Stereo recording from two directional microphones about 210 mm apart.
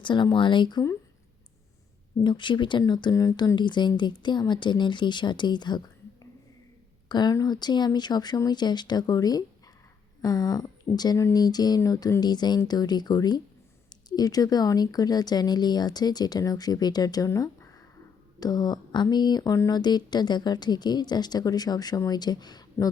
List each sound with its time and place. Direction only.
0.0 s speech: 20° left (ahead or behind)
2.2 s speech: 20° left (ahead or behind)
7.1 s speech: 20° left (ahead or behind)